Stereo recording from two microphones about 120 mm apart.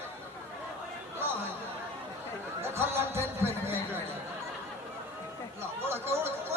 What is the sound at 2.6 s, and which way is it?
Speech, 20° right (ahead or behind).